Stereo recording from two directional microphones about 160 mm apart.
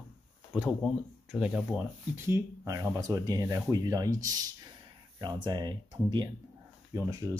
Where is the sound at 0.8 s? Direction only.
Centre (ahead or behind).